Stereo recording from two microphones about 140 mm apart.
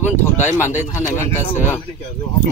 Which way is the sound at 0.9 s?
15° left (ahead or behind).